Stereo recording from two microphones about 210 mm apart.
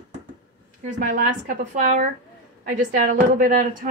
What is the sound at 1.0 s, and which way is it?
A woman's voice, 40° right (ahead or behind).